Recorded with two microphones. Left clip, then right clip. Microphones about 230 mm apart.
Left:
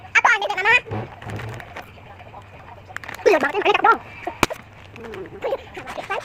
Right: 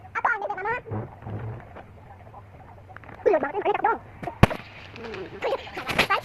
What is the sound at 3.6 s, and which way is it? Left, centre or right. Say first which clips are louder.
Speech: left 7 dB; left.